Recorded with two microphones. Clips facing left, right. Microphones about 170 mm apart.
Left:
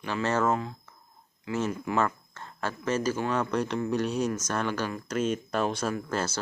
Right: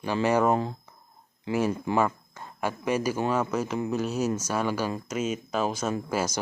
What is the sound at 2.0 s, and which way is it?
Speech, 10° right (ahead or behind).